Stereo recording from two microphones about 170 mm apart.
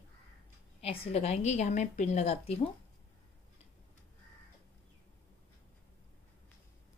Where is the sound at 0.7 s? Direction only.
35° left (ahead or behind).